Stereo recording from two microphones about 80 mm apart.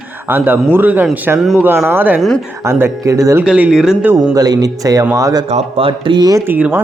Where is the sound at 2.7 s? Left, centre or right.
Right.